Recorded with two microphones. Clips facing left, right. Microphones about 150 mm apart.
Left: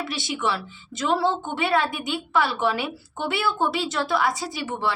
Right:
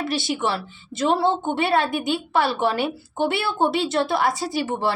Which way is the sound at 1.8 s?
60° right (ahead or behind).